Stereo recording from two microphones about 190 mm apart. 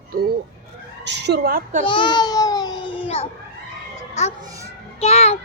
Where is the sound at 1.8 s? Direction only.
25° left (ahead or behind).